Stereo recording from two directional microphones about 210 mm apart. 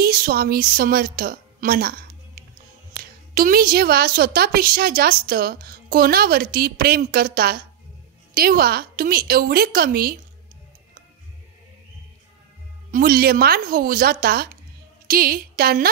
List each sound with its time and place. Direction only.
0.0 s a woman's voice: 45° right (ahead or behind)
12.9 s a woman's voice: 45° right (ahead or behind)